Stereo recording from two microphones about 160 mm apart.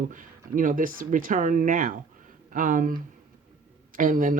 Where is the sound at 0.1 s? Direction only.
55° right (ahead or behind).